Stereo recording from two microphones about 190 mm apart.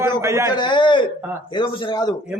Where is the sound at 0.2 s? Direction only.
15° right (ahead or behind).